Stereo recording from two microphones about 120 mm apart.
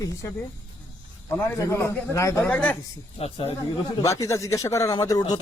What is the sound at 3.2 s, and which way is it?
Speech, 55° left (ahead or behind).